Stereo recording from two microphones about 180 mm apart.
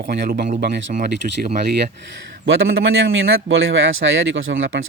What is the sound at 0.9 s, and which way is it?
Speech, 50° right (ahead or behind).